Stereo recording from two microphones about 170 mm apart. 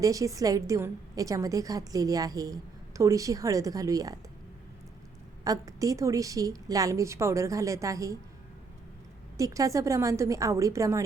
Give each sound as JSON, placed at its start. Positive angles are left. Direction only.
{"t": 0.0, "sound": "a woman's voice", "side_deg": -20}
{"t": 5.5, "sound": "a woman's voice", "side_deg": -20}
{"t": 9.4, "sound": "a woman's voice", "side_deg": -20}